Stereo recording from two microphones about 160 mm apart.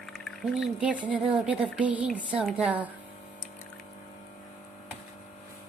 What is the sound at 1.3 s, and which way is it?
Speech, 5° right (ahead or behind).